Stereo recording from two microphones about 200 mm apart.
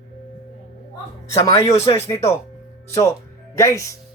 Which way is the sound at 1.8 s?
30° left (ahead or behind).